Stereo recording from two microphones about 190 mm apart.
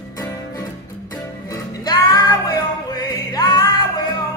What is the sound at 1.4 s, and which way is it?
Music, 20° left (ahead or behind).